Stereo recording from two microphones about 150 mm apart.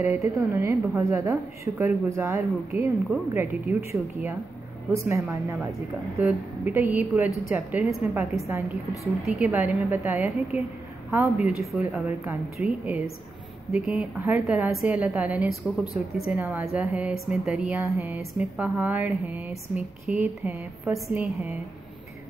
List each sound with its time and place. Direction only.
0.0 s a woman's voice: 15° right (ahead or behind)
18.1 s a woman's voice: 5° right (ahead or behind)